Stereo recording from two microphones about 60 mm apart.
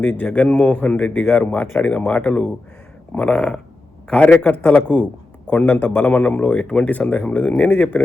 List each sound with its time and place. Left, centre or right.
0.0 s a man's voice: left